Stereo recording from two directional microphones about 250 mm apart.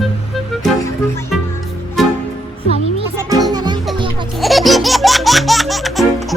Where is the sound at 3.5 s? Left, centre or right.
Centre.